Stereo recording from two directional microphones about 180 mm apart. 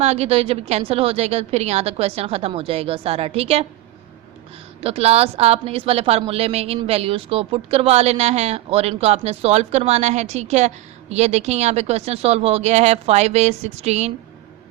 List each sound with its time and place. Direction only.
0.0 s a woman's voice: 35° right (ahead or behind)
4.8 s a woman's voice: 35° right (ahead or behind)